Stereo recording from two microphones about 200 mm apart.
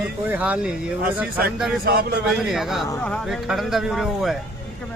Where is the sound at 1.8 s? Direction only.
45° right (ahead or behind).